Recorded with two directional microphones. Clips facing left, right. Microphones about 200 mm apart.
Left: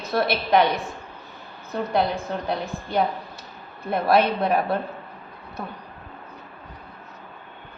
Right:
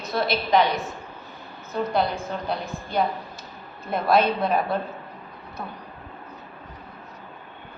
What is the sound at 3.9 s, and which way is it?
Speech, 60° left (ahead or behind).